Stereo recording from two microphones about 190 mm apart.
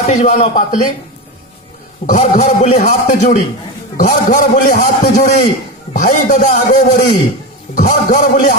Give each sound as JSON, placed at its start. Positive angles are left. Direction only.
{"t": 0.1, "sound": "speech", "side_deg": 40}
{"t": 2.1, "sound": "a man's voice", "side_deg": 40}